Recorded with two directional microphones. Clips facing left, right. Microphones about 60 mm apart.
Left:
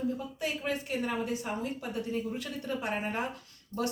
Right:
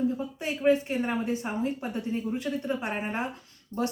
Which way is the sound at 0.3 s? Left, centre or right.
Right.